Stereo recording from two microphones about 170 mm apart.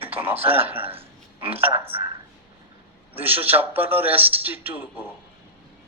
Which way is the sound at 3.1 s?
10° right (ahead or behind).